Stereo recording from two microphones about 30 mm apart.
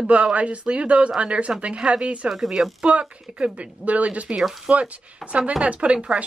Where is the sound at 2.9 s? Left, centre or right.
Right.